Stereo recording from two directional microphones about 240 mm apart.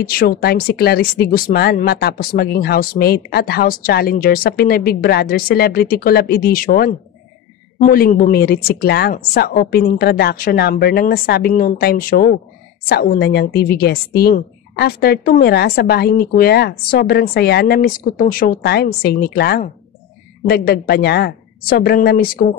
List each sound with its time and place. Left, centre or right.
0.0 s a woman's voice: left